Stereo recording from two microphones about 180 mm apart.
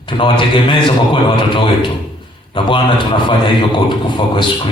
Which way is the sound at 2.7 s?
25° left (ahead or behind).